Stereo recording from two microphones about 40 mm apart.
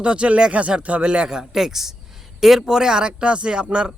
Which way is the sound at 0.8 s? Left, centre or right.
Right.